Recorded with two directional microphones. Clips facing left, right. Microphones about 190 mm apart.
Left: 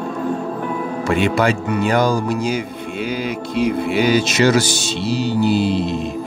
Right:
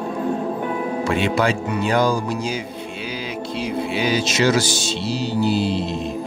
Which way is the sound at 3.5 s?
55° left (ahead or behind).